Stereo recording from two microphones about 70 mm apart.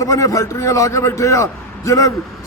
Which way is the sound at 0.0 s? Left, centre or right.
Left.